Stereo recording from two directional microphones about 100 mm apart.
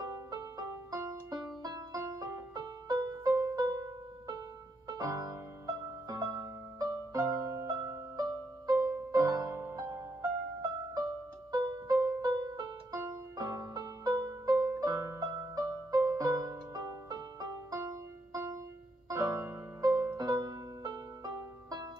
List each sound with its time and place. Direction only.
0.0 s music: 35° right (ahead or behind)
11.5 s music: 40° right (ahead or behind)